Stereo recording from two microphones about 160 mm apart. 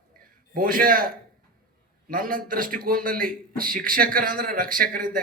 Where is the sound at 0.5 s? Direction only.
65° right (ahead or behind).